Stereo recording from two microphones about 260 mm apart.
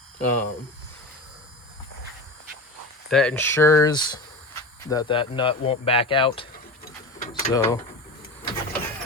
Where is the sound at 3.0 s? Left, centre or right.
Centre.